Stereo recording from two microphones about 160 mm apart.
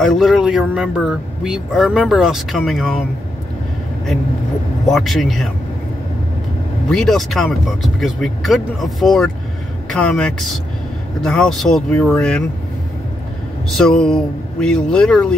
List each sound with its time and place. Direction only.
0.0 s speech: centre (ahead or behind)
4.8 s speech: centre (ahead or behind)
6.9 s speech: centre (ahead or behind)
13.7 s speech: 5° left (ahead or behind)